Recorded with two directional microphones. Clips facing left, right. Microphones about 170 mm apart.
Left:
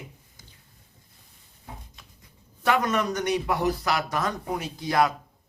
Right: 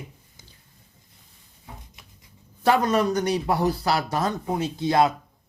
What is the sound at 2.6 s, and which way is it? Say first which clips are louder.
Speech: right 4 dB; 30° right (ahead or behind).